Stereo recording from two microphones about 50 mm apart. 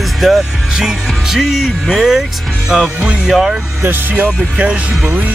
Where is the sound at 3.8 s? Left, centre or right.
Right.